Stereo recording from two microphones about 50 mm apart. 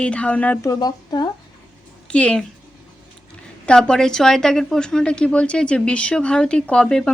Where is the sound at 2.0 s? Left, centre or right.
Left.